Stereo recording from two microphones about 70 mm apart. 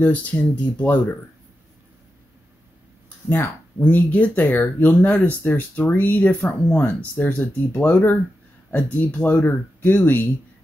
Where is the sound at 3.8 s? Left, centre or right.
Left.